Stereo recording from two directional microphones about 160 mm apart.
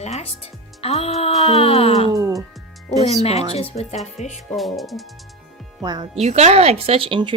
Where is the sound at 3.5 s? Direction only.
40° left (ahead or behind).